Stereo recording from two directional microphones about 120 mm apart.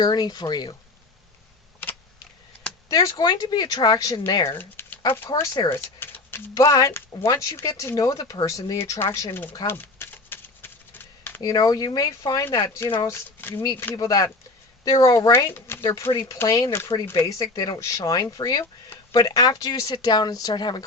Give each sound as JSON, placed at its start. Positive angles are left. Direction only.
{"t": 0.0, "sound": "speech", "side_deg": 35}
{"t": 2.9, "sound": "speech", "side_deg": 30}
{"t": 4.4, "sound": "speech", "side_deg": 20}
{"t": 5.3, "sound": "speech", "side_deg": 35}
{"t": 5.6, "sound": "speech", "side_deg": 20}
{"t": 9.6, "sound": "a sound", "side_deg": 20}
{"t": 11.3, "sound": "speech", "side_deg": 35}
{"t": 15.4, "sound": "speech", "side_deg": 20}